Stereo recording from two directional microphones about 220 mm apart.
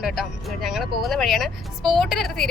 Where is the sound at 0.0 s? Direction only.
Centre (ahead or behind).